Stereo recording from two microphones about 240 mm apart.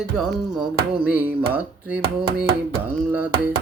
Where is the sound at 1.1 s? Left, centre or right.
Centre.